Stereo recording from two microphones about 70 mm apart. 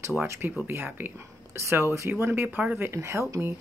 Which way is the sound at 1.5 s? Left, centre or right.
Right.